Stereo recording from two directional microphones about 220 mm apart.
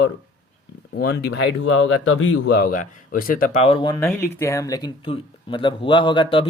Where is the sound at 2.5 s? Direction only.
40° left (ahead or behind).